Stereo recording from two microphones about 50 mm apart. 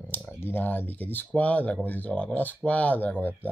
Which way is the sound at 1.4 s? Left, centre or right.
Left.